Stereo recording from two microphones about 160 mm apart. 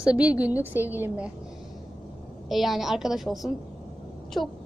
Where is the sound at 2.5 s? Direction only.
Centre (ahead or behind).